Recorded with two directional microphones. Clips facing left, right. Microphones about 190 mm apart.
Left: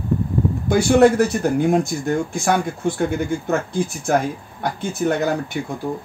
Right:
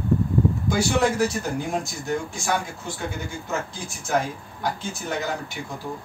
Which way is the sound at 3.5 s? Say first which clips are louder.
Left 9 dB; 60° left (ahead or behind).